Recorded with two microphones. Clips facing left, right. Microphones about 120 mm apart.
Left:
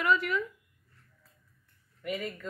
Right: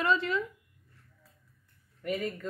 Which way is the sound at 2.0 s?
30° right (ahead or behind).